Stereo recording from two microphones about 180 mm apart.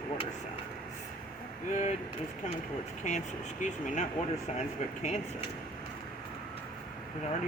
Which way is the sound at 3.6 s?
45° left (ahead or behind).